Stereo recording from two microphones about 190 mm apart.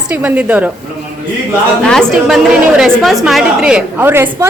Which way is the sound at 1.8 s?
5° left (ahead or behind).